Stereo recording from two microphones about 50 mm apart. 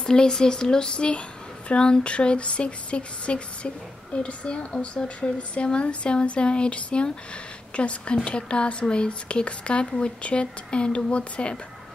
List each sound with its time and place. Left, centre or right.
0.0 s speech: centre